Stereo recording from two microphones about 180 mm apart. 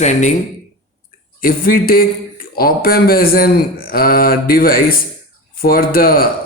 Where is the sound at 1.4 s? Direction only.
55° left (ahead or behind).